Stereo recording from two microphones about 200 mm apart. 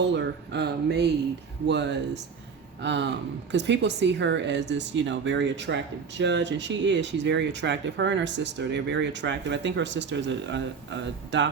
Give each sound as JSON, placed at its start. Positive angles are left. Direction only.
{"t": 0.0, "sound": "speech", "side_deg": -60}